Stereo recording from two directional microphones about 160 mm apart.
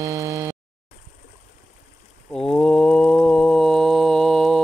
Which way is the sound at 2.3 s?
5° left (ahead or behind).